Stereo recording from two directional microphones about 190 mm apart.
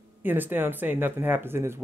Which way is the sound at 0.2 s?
10° right (ahead or behind).